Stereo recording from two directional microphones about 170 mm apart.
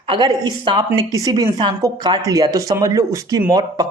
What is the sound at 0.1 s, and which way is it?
Speech, 25° right (ahead or behind).